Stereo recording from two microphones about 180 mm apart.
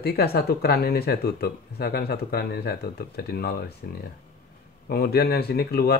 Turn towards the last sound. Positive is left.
turn(degrees=60)  # may be behind; listen again after turning